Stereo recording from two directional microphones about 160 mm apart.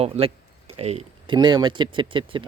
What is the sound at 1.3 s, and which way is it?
Speech, 25° right (ahead or behind).